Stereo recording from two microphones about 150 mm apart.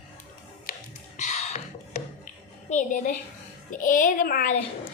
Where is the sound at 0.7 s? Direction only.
75° left (ahead or behind).